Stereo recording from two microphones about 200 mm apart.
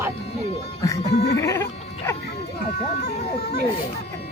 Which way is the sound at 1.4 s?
15° left (ahead or behind).